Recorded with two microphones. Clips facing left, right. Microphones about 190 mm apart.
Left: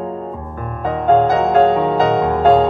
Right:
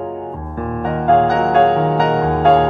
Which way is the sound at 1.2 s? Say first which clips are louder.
Even; centre (ahead or behind).